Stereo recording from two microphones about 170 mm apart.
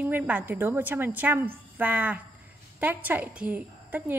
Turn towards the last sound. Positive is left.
turn(degrees=-10)  # may be behind; listen again after turning